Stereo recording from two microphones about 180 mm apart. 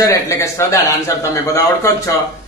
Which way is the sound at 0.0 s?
15° left (ahead or behind).